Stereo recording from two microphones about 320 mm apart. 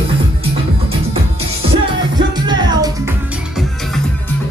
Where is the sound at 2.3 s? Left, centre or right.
Centre.